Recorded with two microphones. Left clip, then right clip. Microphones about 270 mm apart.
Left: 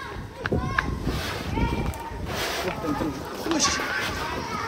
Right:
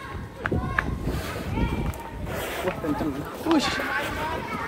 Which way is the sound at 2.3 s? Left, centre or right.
Centre.